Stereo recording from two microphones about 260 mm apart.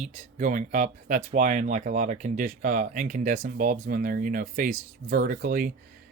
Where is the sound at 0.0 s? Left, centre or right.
Right.